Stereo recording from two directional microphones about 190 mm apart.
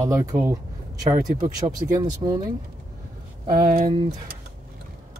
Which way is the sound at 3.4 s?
50° right (ahead or behind).